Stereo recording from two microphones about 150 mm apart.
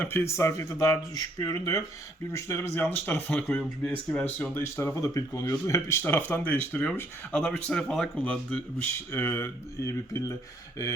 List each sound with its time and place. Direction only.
0.0 s speech: 15° left (ahead or behind)